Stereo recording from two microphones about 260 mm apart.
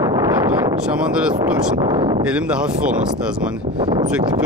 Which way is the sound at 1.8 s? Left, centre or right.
Centre.